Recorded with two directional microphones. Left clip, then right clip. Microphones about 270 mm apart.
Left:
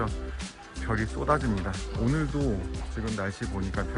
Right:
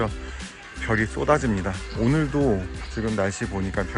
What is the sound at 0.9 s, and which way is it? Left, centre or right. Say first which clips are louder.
Speech: right 6 dB; centre.